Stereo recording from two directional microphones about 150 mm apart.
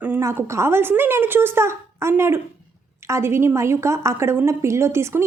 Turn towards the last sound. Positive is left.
turn(degrees=-15)  # may be behind; listen again after turning